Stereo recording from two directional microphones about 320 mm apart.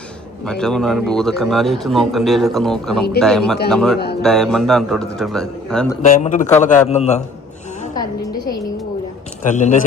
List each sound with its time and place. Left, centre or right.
0.4 s a man's voice: centre
6.1 s a man's voice: left